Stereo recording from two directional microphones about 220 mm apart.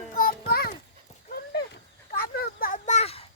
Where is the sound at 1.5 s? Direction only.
45° left (ahead or behind); by 3.2 s 30° left (ahead or behind).